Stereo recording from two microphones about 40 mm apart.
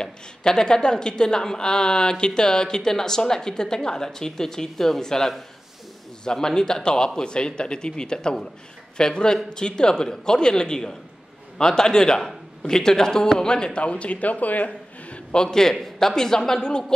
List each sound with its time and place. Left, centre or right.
0.0 s a man's voice: centre; by 14.7 s left
14.7 s a sound: left
15.3 s speech: centre